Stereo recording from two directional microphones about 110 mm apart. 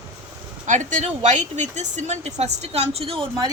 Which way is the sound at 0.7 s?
90° right.